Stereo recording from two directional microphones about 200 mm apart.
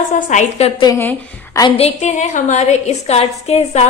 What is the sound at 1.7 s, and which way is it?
A woman's voice, 30° left (ahead or behind).